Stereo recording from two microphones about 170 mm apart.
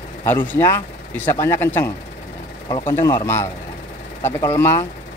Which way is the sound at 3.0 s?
20° left (ahead or behind).